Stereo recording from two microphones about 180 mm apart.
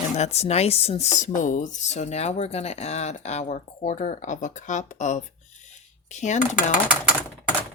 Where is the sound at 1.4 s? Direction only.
45° left (ahead or behind).